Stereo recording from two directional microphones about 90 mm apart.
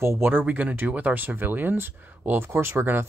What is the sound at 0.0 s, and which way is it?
Speech, 25° right (ahead or behind).